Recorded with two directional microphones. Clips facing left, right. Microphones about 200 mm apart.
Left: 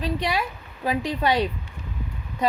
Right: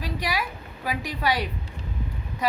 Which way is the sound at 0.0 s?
25° left (ahead or behind).